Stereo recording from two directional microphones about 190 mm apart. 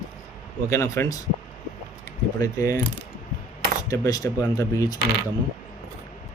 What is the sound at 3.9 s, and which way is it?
Speech, 15° left (ahead or behind).